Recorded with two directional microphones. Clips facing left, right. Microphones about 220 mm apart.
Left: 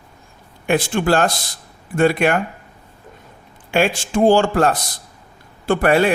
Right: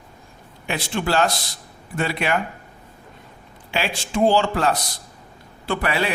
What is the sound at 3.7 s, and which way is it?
Speech, 50° left (ahead or behind).